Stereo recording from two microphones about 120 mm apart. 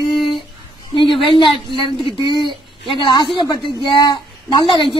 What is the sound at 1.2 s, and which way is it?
Speech, 45° left (ahead or behind).